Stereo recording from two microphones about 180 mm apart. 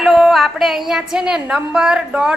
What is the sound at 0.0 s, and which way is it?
A woman's voice, centre (ahead or behind).